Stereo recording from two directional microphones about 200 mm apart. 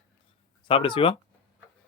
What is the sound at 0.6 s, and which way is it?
Speech, 25° left (ahead or behind).